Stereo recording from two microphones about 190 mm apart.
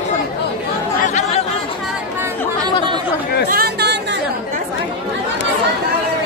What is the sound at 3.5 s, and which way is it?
Chatter, 55° right (ahead or behind).